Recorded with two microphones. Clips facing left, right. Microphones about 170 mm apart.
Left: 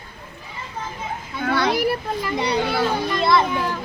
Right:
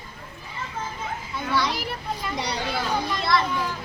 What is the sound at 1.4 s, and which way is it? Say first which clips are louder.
Children playing: left 6 dB; 60° left (ahead or behind).